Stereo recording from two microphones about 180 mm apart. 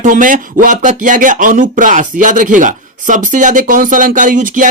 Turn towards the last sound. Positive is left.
turn(degrees=-45)  # may be behind; listen again after turning